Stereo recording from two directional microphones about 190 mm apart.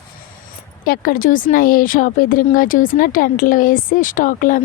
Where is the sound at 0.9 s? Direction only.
50° left (ahead or behind).